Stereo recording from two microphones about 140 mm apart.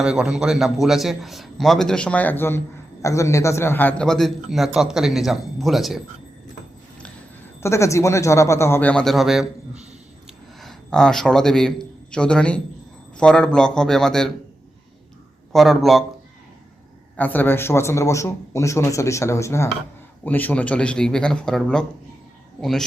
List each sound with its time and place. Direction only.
0.0 s a man's voice: 5° right (ahead or behind)
7.6 s a man's voice: 20° left (ahead or behind); by 14.3 s 5° left (ahead or behind)
15.5 s a man's voice: centre (ahead or behind)
17.2 s a man's voice: 10° left (ahead or behind)